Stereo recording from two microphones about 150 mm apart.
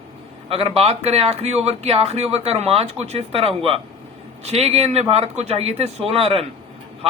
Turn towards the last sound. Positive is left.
turn(degrees=-40)  # may be behind; listen again after turning